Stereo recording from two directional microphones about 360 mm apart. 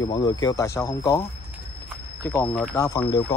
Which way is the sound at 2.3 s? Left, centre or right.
Centre.